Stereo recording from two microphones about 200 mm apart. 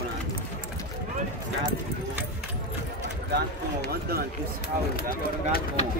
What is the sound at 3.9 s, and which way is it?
Speech, 50° right (ahead or behind).